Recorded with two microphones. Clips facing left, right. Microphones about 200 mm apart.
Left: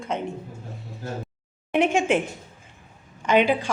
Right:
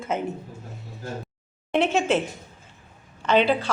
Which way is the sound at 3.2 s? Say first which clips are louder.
Even; 10° left (ahead or behind).